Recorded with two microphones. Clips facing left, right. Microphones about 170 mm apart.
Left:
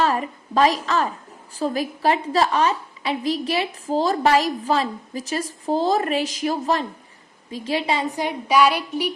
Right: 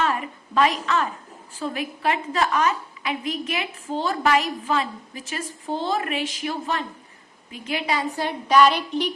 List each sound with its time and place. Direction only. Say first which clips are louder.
0.0 s a woman's voice: left 3 dB; 35° left (ahead or behind)
8.1 s a woman's voice: right 3 dB; 15° left (ahead or behind)